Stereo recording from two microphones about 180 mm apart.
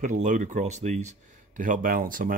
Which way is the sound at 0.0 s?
45° right (ahead or behind).